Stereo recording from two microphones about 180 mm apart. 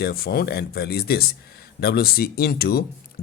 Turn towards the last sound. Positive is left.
turn(degrees=50)  # may be behind; listen again after turning